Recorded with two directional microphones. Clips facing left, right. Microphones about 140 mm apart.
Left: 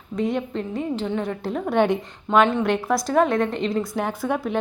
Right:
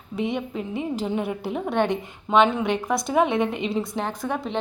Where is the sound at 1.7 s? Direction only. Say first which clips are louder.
Left 4 dB; 10° left (ahead or behind).